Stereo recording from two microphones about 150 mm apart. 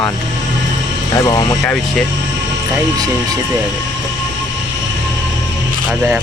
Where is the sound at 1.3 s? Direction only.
25° left (ahead or behind).